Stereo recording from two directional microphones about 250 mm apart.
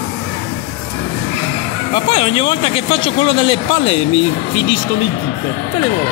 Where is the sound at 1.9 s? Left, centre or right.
Left.